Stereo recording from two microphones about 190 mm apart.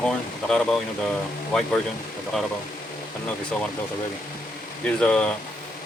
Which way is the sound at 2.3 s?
5° left (ahead or behind).